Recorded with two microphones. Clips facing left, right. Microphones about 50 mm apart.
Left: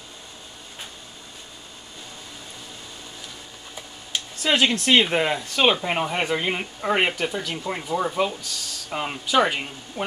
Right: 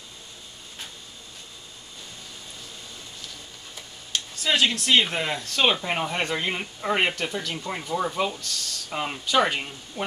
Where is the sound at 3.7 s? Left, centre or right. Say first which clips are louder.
Left 1 dB; centre.